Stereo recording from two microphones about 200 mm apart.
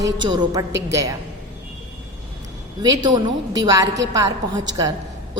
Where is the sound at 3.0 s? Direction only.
20° right (ahead or behind).